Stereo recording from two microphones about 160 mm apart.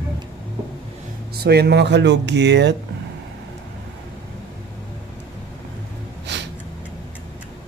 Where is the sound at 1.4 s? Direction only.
85° right.